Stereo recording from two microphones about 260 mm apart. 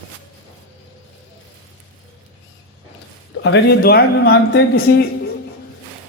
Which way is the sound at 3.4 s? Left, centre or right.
Left.